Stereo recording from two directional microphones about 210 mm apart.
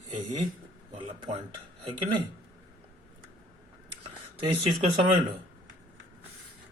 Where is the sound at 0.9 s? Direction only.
25° right (ahead or behind).